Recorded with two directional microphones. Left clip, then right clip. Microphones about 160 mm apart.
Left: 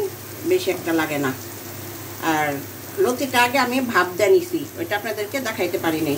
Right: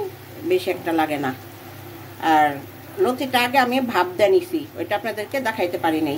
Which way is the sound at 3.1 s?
50° right (ahead or behind).